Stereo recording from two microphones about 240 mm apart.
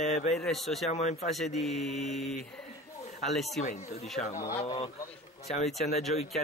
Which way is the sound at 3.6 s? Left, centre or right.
Left.